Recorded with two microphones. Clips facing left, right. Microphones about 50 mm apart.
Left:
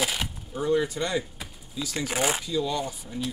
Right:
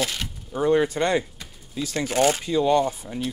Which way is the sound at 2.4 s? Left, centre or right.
Right.